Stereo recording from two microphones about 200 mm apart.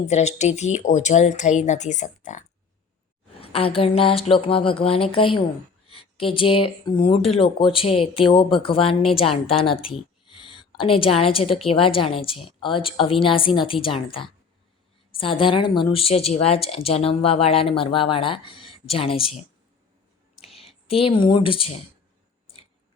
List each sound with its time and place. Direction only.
0.0 s speech: 35° left (ahead or behind)
3.4 s a woman's voice: 30° left (ahead or behind)
20.6 s speech: 30° left (ahead or behind)